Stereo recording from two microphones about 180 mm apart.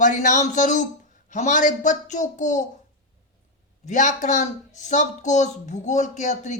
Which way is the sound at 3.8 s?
45° left (ahead or behind).